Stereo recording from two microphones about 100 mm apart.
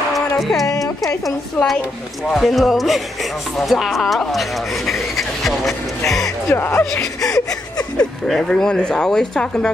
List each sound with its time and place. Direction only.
0.4 s speech: centre (ahead or behind)
0.7 s speech: 35° left (ahead or behind)
1.2 s speech: centre (ahead or behind)
6.5 s speech: 25° left (ahead or behind)
7.2 s whimper: 35° left (ahead or behind)
8.3 s speech: 5° left (ahead or behind)